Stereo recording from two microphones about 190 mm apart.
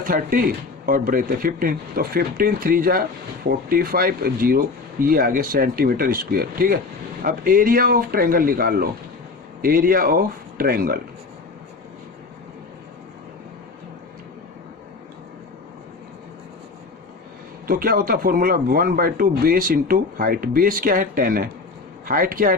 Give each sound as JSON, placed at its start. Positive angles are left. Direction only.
{"t": 0.0, "sound": "speech", "side_deg": -45}
{"t": 17.7, "sound": "speech", "side_deg": -50}